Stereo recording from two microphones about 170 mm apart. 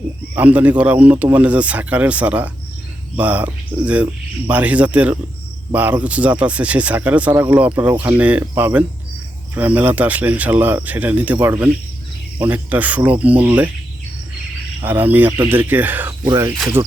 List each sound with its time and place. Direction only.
0.3 s speech: 10° right (ahead or behind)
14.8 s speech: 10° right (ahead or behind)